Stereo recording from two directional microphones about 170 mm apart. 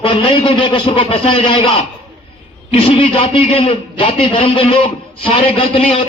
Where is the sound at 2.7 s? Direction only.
35° left (ahead or behind).